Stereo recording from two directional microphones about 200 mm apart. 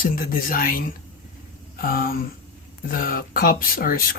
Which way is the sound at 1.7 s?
45° left (ahead or behind).